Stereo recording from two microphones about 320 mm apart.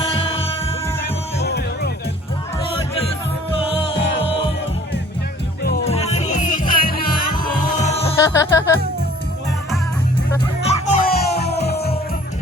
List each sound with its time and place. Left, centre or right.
0.0 s music: centre
1.5 s music: left
4.2 s music: centre
5.6 s music: centre
8.0 s music: centre
10.7 s music: left